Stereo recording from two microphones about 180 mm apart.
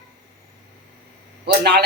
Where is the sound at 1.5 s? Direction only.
70° right (ahead or behind).